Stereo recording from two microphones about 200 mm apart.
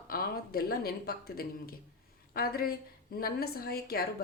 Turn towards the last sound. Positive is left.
turn(degrees=50)  # may be behind; listen again after turning